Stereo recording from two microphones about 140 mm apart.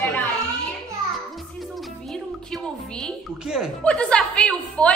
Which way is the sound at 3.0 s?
5° right (ahead or behind).